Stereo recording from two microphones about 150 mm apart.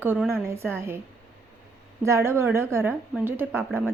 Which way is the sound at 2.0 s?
20° right (ahead or behind).